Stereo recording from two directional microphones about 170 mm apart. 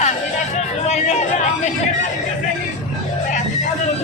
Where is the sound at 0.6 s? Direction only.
40° left (ahead or behind).